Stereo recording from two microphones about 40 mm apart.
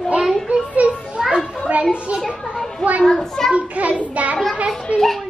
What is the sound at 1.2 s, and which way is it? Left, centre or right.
Children playing, right.